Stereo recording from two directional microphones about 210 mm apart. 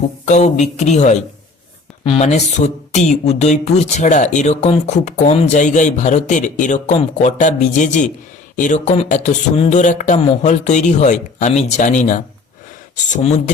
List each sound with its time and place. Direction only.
0.3 s speech: 35° left (ahead or behind)